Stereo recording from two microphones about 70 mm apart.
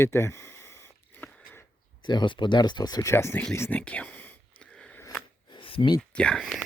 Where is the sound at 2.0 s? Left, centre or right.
Left.